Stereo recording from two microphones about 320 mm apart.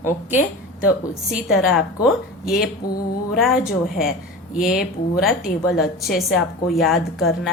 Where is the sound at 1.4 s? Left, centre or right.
Centre.